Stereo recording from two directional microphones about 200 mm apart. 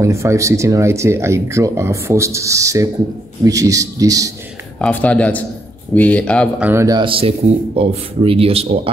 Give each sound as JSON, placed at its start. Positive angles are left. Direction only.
{"t": 0.0, "sound": "speech", "side_deg": -15}
{"t": 4.7, "sound": "a man's voice", "side_deg": 5}
{"t": 6.6, "sound": "speech", "side_deg": -15}